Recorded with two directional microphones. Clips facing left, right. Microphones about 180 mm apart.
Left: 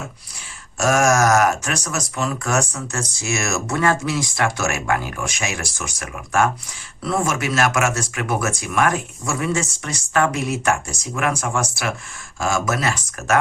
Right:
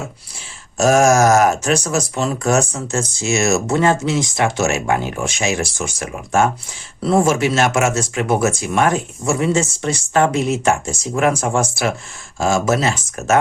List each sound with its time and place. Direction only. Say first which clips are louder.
0.8 s speech: right 4 dB; 25° right (ahead or behind)